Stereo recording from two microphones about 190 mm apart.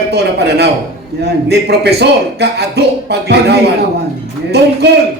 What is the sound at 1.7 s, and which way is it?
Speech, 55° right (ahead or behind).